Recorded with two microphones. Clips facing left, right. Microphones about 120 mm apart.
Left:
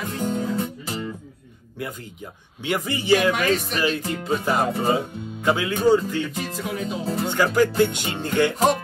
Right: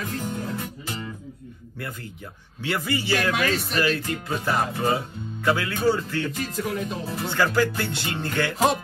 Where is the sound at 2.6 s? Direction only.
20° left (ahead or behind).